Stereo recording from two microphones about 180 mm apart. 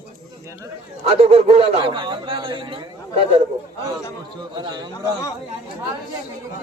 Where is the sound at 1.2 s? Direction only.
35° right (ahead or behind).